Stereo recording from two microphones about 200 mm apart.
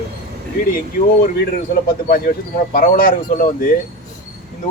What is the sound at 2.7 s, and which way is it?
Speech, 45° left (ahead or behind).